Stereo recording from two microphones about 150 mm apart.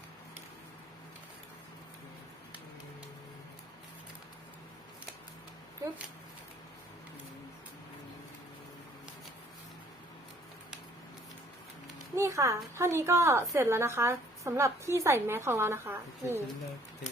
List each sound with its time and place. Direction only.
12.1 s a woman's voice: 20° right (ahead or behind)